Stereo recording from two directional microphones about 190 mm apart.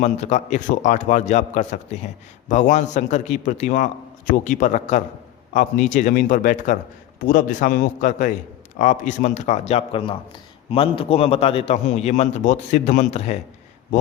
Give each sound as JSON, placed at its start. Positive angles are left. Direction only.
{"t": 0.0, "sound": "a man's voice", "side_deg": 40}